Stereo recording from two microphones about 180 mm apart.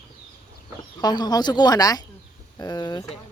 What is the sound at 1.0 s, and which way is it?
Speech, 20° left (ahead or behind).